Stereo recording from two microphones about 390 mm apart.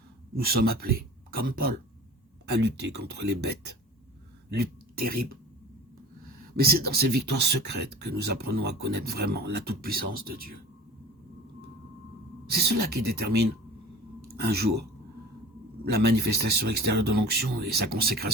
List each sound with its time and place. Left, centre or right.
0.3 s speech: right
6.6 s speech: right
12.5 s speech: right